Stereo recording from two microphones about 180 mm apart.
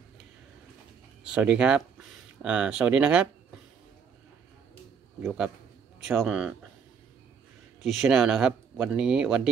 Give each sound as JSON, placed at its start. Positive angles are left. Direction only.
{"t": 1.2, "sound": "speech", "side_deg": -5}
{"t": 6.0, "sound": "speech", "side_deg": 0}
{"t": 7.8, "sound": "speech", "side_deg": 0}